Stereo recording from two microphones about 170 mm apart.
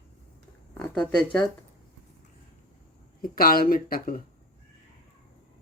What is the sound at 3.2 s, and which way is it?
Speech, 60° left (ahead or behind).